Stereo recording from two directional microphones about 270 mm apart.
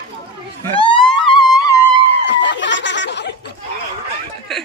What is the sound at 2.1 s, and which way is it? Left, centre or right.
Snicker, left.